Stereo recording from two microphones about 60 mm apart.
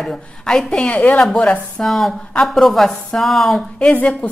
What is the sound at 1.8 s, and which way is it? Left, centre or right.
A woman's voice, centre.